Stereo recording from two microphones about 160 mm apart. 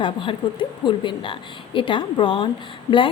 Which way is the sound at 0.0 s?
30° left (ahead or behind).